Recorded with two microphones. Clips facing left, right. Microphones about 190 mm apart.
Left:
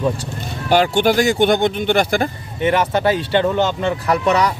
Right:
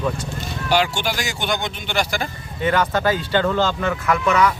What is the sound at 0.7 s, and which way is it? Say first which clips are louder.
Speech: left 6 dB; 55° left (ahead or behind).